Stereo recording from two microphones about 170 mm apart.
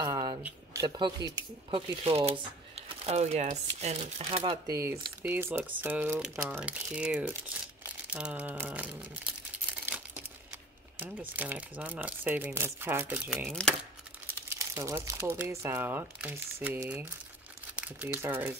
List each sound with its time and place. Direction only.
0.0 s a sound: 25° right (ahead or behind)
0.7 s speech: 25° right (ahead or behind); by 9.3 s 5° right (ahead or behind)
11.0 s speech: 10° right (ahead or behind)
14.2 s speech: 15° right (ahead or behind)